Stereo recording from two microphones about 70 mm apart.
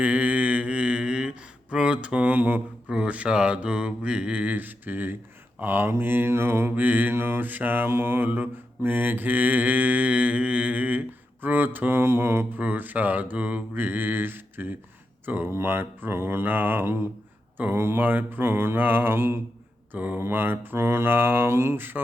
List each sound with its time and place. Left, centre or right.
0.0 s mantra: right